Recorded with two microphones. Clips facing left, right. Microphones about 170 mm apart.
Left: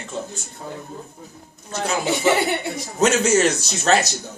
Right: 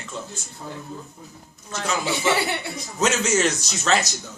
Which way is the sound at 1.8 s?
40° left (ahead or behind).